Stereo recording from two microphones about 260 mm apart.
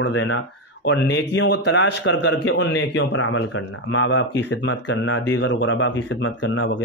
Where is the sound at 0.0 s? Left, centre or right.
Left.